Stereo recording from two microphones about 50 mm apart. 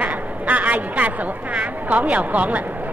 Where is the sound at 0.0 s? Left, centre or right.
Right.